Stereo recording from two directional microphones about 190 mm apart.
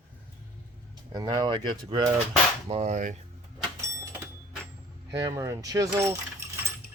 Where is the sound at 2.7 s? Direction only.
35° right (ahead or behind).